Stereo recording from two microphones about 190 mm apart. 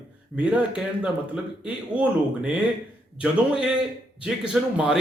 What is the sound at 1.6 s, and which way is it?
Speech, 5° right (ahead or behind).